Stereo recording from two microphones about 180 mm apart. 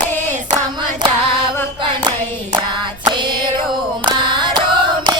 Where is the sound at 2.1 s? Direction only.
25° right (ahead or behind).